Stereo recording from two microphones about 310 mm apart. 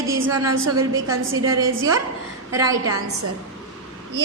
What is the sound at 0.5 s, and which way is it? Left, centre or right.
Speech, right.